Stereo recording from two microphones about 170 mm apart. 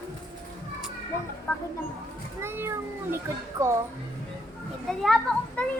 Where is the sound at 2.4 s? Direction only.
15° right (ahead or behind).